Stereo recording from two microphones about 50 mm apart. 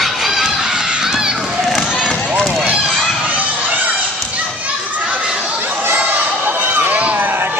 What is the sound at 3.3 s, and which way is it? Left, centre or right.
Crowd, right.